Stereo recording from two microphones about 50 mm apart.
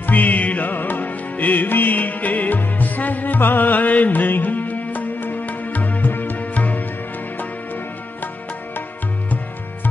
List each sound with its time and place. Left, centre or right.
0.0 s music: left